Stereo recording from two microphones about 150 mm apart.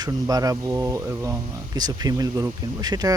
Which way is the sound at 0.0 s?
25° right (ahead or behind).